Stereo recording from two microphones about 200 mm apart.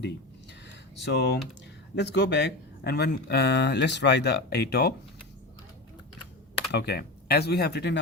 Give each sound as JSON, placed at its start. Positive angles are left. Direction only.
{"t": 1.0, "sound": "speech", "side_deg": 60}
{"t": 6.7, "sound": "speech", "side_deg": 55}